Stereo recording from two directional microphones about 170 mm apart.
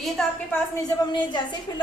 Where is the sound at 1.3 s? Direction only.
25° left (ahead or behind).